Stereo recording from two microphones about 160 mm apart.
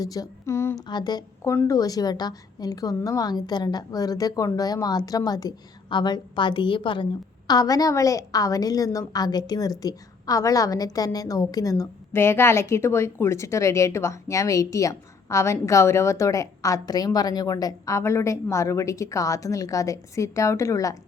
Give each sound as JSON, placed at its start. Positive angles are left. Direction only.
{"t": 0.0, "sound": "speech", "side_deg": 25}
{"t": 0.9, "sound": "a woman's voice", "side_deg": 25}